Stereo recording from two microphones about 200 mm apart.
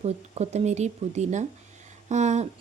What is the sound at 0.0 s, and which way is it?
Speech, 35° right (ahead or behind).